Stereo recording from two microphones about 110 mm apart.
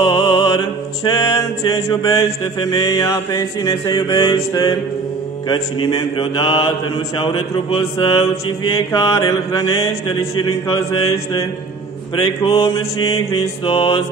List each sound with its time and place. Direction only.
0.0 s music: 45° left (ahead or behind)
1.0 s mantra: 35° left (ahead or behind)
5.5 s mantra: 45° left (ahead or behind)
8.7 s mantra: 35° left (ahead or behind)
12.2 s mantra: 50° left (ahead or behind)